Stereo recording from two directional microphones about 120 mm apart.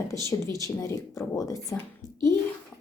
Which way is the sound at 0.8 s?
25° left (ahead or behind).